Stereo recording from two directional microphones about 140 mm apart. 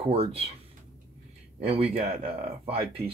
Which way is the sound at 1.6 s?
45° right (ahead or behind).